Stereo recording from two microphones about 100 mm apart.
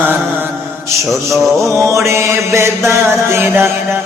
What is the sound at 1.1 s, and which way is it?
Mantra, centre (ahead or behind).